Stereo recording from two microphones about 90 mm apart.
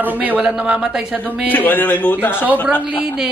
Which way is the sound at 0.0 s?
20° right (ahead or behind).